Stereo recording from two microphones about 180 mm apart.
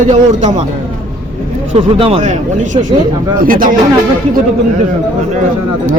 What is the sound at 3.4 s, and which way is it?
Speech, 50° right (ahead or behind).